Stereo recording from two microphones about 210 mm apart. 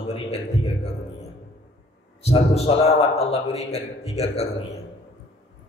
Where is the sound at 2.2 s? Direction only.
30° left (ahead or behind).